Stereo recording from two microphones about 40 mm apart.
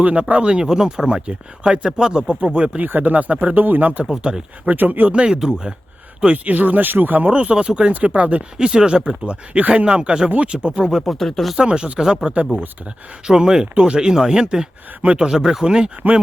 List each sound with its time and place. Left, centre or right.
0.0 s speech: right
2.8 s speech: right
4.2 s speech: right
4.6 s speech: right
5.1 s speech: right
6.3 s speech: right
7.3 s speech: right
8.5 s speech: right
11.0 s speech: centre
11.5 s speech: right
15.0 s speech: right
15.3 s speech: centre
16.0 s speech: right